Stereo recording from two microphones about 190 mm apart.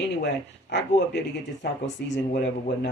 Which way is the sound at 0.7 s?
65° left (ahead or behind).